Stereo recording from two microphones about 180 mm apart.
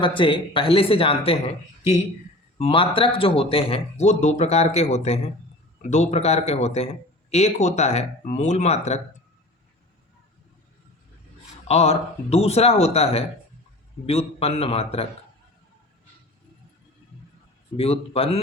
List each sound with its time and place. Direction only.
0.0 s speech: 25° left (ahead or behind)
2.6 s speech: 30° left (ahead or behind)
11.7 s speech: 35° left (ahead or behind)
17.7 s speech: 35° left (ahead or behind)